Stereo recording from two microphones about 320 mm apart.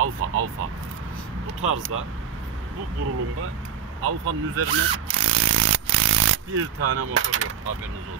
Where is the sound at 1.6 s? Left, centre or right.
Right.